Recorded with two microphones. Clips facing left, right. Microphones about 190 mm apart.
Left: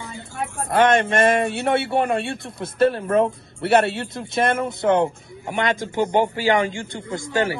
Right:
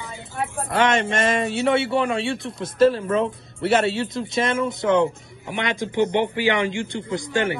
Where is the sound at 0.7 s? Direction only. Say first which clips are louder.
Left 4 dB; 55° left (ahead or behind).